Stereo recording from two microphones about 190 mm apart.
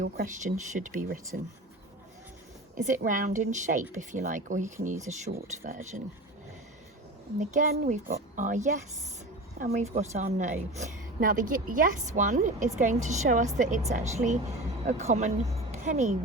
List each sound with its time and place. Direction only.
0.0 s speech: 45° right (ahead or behind)
2.7 s a woman's voice: 45° right (ahead or behind)
7.3 s a woman's voice: 45° right (ahead or behind)